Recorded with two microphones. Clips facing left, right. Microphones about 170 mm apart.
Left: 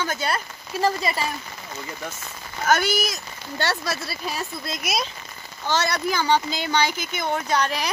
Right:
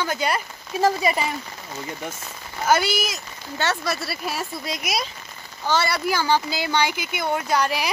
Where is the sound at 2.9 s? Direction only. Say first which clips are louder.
Left 1 dB; 40° left (ahead or behind).